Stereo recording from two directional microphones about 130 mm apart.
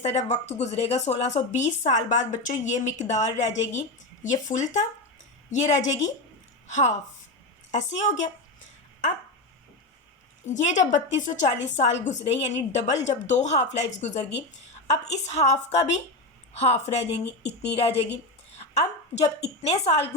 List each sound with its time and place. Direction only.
0.0 s a woman's voice: 55° left (ahead or behind)
10.4 s a woman's voice: 65° left (ahead or behind)